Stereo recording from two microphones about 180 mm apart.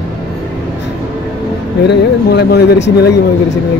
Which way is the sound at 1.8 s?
70° left (ahead or behind).